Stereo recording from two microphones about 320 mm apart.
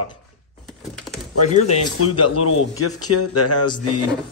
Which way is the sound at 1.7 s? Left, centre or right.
Left.